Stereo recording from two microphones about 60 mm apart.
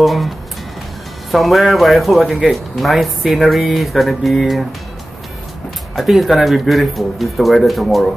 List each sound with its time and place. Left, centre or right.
0.0 s speech: centre
1.3 s speech: centre
5.9 s speech: centre